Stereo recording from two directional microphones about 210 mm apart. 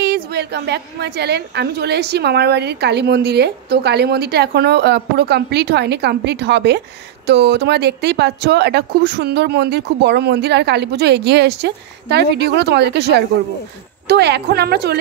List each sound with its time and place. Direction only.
0.0 s a woman's voice: 50° right (ahead or behind)